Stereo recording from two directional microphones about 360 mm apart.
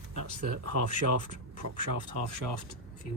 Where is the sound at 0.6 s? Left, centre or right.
Right.